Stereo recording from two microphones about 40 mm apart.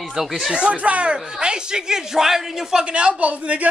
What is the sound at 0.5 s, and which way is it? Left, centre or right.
Speech, right.